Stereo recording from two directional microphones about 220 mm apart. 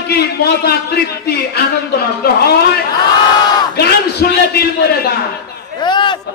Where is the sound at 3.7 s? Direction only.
45° left (ahead or behind).